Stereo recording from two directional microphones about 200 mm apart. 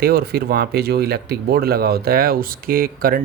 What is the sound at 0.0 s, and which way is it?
Speech, 50° right (ahead or behind).